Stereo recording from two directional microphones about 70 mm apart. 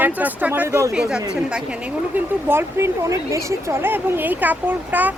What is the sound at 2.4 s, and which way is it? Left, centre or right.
Speech, right.